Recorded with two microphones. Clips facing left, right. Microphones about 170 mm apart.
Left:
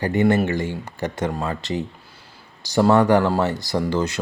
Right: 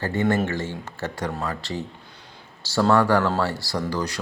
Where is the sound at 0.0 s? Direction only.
15° left (ahead or behind).